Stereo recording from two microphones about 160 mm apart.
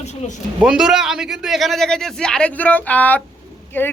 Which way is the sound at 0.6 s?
5° right (ahead or behind).